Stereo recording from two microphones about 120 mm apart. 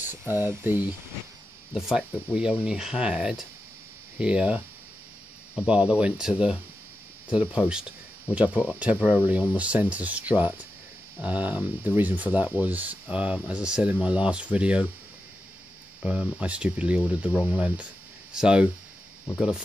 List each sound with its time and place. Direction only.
0.0 s speech: 15° right (ahead or behind)
1.7 s speech: 5° right (ahead or behind)
5.7 s speech: 10° right (ahead or behind)
16.0 s speech: 10° right (ahead or behind)